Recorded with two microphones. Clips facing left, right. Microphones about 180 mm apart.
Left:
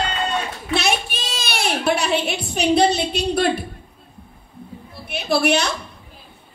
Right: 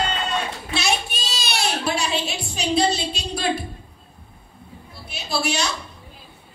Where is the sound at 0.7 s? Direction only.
55° left (ahead or behind).